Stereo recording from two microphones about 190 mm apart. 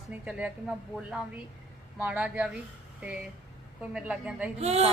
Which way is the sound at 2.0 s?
10° right (ahead or behind).